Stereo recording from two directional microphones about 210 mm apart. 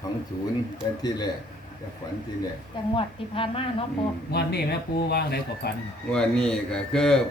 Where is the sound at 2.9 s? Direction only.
25° left (ahead or behind).